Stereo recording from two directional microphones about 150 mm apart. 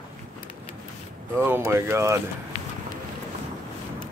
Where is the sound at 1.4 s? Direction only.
15° right (ahead or behind).